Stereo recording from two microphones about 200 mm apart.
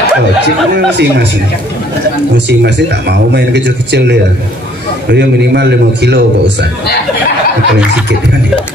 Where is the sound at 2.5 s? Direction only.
60° right (ahead or behind).